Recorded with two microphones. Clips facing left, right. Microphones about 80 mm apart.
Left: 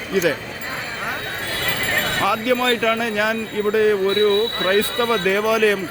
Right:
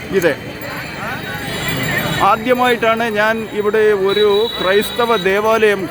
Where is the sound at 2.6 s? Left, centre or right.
Right.